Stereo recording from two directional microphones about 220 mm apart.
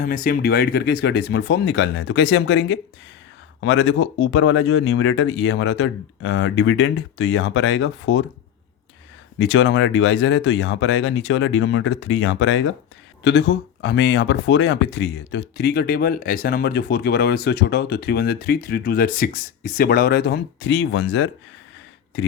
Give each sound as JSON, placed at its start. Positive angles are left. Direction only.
{"t": 0.0, "sound": "speech", "side_deg": 40}
{"t": 9.4, "sound": "speech", "side_deg": 60}